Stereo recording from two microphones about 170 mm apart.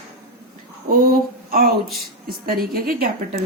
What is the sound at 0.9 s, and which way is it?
A woman's voice, 60° right (ahead or behind).